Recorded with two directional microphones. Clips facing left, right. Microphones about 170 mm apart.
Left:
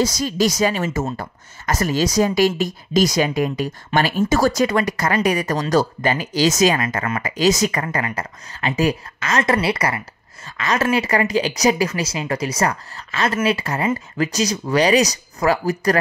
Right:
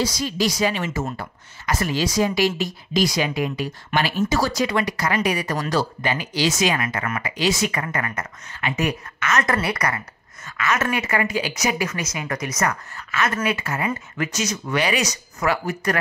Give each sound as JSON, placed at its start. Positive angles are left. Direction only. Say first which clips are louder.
{"t": 0.0, "sound": "speech", "louder": "left 4 dB", "side_deg": 45}